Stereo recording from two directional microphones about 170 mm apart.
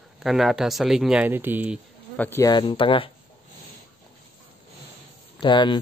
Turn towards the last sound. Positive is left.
turn(degrees=25)  # may be behind; listen again after turning